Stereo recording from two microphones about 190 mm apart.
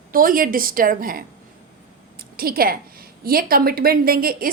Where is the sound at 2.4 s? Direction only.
50° right (ahead or behind).